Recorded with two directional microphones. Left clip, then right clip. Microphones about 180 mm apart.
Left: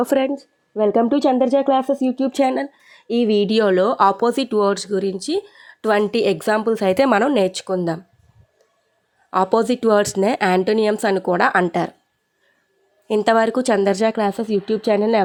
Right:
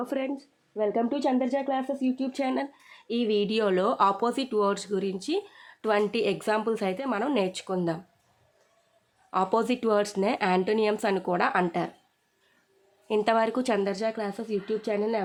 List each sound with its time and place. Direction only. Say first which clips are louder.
0.0 s speech: left 12 dB; 50° left (ahead or behind)
6.9 s speech: left 15 dB; 70° left (ahead or behind)
7.2 s speech: left 10 dB; 40° left (ahead or behind)
9.3 s speech: left 8 dB; 35° left (ahead or behind)
13.1 s speech: left 8 dB; 35° left (ahead or behind)
13.8 s speech: left 11 dB; 50° left (ahead or behind)